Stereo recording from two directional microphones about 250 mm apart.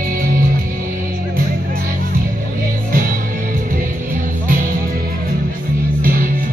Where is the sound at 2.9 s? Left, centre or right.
Right.